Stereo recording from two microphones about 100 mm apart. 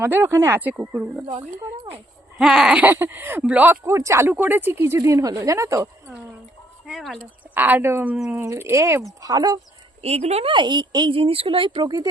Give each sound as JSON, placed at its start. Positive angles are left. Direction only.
{"t": 0.0, "sound": "speech", "side_deg": -20}
{"t": 2.4, "sound": "speech", "side_deg": -5}
{"t": 3.8, "sound": "speech", "side_deg": -30}
{"t": 4.9, "sound": "a woman's voice", "side_deg": -35}
{"t": 6.8, "sound": "a sound", "side_deg": 0}
{"t": 7.2, "sound": "speech", "side_deg": -20}
{"t": 8.1, "sound": "speech", "side_deg": -10}
{"t": 8.4, "sound": "speech", "side_deg": -25}
{"t": 9.2, "sound": "a woman's voice", "side_deg": -40}
{"t": 10.0, "sound": "speech", "side_deg": -90}
{"t": 10.5, "sound": "speech", "side_deg": -50}